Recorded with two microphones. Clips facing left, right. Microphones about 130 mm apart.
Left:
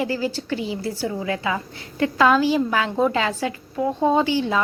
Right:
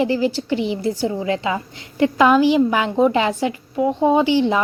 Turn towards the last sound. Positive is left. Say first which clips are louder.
# right 4 dB
turn(degrees=-20)  # may be behind; listen again after turning